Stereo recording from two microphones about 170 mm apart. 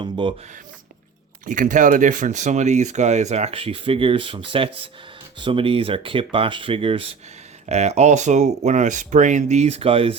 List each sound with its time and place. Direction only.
0.0 s speech: 30° right (ahead or behind)
1.5 s speech: 50° right (ahead or behind); by 10.2 s 35° right (ahead or behind)